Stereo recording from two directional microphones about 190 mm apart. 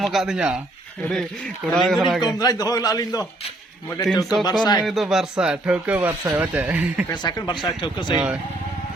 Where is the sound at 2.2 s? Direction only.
20° left (ahead or behind).